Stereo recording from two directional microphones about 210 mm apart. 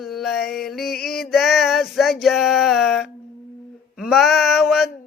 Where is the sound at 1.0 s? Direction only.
50° left (ahead or behind).